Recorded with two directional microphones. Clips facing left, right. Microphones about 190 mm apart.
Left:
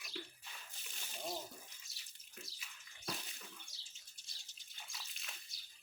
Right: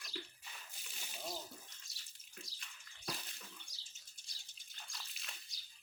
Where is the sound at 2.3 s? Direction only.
5° left (ahead or behind).